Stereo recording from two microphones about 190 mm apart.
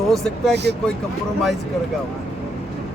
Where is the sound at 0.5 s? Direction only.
60° right (ahead or behind).